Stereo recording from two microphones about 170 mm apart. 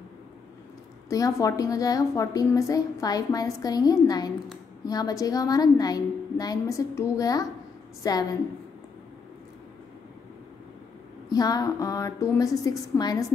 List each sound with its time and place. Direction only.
1.0 s a woman's voice: 20° left (ahead or behind)
11.2 s a woman's voice: 20° left (ahead or behind)